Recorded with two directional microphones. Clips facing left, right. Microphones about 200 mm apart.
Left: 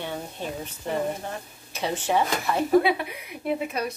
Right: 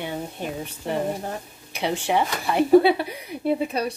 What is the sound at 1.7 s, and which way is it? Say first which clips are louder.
Speech: right 2 dB; 15° right (ahead or behind).